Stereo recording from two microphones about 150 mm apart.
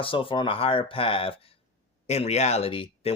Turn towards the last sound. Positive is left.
turn(degrees=40)  # may be behind; listen again after turning